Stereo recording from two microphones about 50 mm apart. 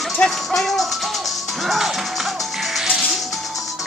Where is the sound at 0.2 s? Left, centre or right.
Centre.